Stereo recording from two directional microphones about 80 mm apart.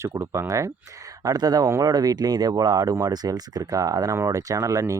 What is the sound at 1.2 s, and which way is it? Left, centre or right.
Speech, right.